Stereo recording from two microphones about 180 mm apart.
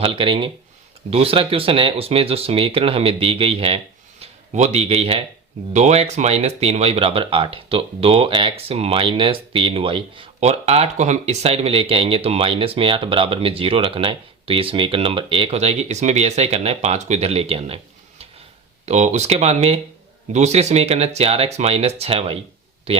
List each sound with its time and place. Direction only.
0.0 s speech: 30° right (ahead or behind)
18.9 s speech: 40° right (ahead or behind)